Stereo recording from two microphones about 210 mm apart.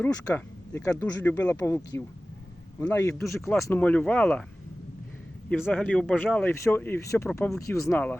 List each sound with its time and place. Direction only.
0.0 s speech: 10° left (ahead or behind)
3.2 s speech: centre (ahead or behind)
5.5 s speech: 5° left (ahead or behind)